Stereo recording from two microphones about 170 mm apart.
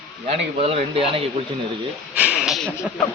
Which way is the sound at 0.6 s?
35° right (ahead or behind).